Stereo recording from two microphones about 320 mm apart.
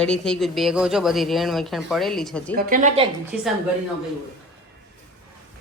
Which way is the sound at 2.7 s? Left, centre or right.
Right.